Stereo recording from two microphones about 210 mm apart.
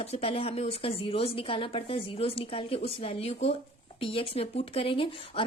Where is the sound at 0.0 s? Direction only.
30° left (ahead or behind).